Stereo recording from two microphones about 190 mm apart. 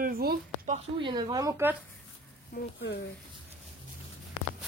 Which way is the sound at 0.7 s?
25° right (ahead or behind).